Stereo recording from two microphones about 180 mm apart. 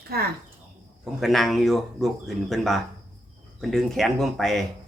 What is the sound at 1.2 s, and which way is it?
Speech, centre (ahead or behind).